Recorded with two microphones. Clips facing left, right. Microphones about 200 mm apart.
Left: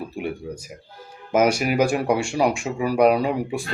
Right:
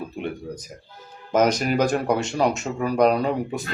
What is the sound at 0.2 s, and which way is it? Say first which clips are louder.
Speech: left 2 dB; 10° left (ahead or behind).